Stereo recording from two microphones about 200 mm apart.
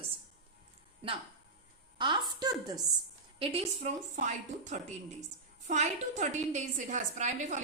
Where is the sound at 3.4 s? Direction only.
30° right (ahead or behind).